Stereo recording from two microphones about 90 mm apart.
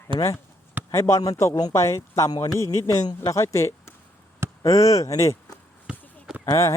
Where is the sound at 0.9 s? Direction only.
30° left (ahead or behind).